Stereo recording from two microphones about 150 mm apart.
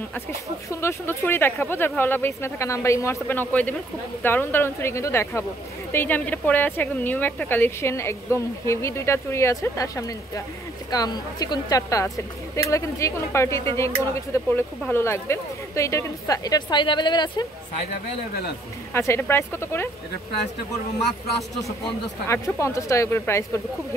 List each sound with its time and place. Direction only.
0.7 s speech: 20° left (ahead or behind)
18.9 s speech: 15° left (ahead or behind)
21.8 s speech: 20° left (ahead or behind)